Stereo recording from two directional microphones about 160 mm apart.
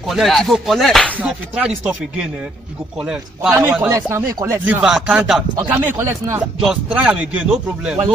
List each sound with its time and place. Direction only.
0.0 s rapping: centre (ahead or behind)
1.2 s rapping: 5° right (ahead or behind)
3.0 s speech: 5° right (ahead or behind)
3.9 s speech: 20° right (ahead or behind)
4.6 s rapping: 5° right (ahead or behind)
5.6 s speech: 15° right (ahead or behind)